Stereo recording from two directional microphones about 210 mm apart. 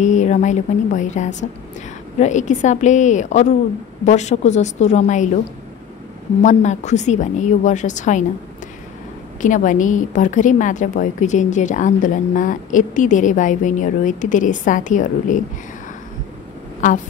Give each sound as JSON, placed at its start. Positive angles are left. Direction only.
{"t": 0.0, "sound": "a woman's voice", "side_deg": 35}
{"t": 6.4, "sound": "a woman's voice", "side_deg": 35}
{"t": 9.4, "sound": "a woman's voice", "side_deg": 40}